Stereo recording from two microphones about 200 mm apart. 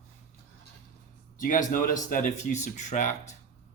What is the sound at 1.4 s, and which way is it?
Speech, 40° left (ahead or behind).